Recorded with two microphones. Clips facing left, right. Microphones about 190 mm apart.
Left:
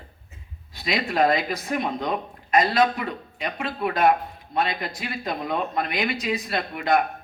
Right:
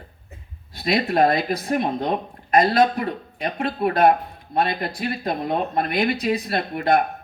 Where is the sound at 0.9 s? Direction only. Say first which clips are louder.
Right 3 dB; 35° right (ahead or behind).